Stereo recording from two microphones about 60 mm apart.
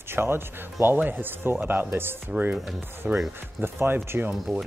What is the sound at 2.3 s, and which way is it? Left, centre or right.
Speech, centre.